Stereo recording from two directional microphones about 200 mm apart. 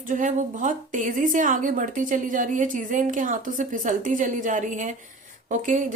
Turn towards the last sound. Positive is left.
turn(degrees=-40)  # may be behind; listen again after turning